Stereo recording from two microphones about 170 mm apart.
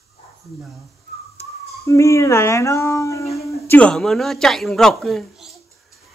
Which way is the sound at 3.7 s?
5° left (ahead or behind).